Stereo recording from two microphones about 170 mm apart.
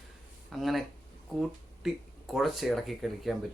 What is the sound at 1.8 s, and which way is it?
Speech, centre (ahead or behind).